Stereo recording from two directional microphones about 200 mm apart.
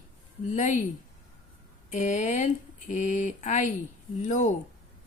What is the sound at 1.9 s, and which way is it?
Mantra, 35° left (ahead or behind).